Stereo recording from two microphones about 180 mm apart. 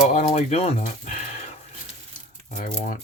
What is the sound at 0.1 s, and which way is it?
Speech, 40° left (ahead or behind).